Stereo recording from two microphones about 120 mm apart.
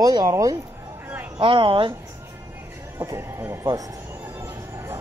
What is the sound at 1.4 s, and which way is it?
Speech, 45° right (ahead or behind).